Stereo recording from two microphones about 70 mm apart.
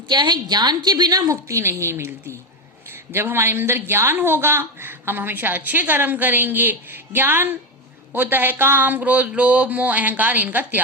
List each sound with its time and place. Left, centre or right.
0.1 s a woman's voice: right
1.3 s a woman's voice: right